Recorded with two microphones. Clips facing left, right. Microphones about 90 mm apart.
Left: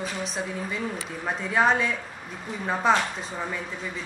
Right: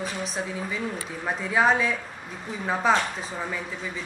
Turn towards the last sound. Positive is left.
turn(degrees=0)  # may be behind; listen again after turning